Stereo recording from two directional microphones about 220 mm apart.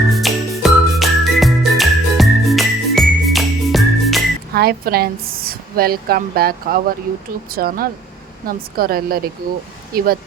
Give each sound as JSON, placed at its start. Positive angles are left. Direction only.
{"t": 0.1, "sound": "music", "side_deg": 0}
{"t": 4.5, "sound": "a woman's voice", "side_deg": -45}